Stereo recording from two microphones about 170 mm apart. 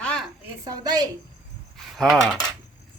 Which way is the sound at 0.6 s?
20° right (ahead or behind).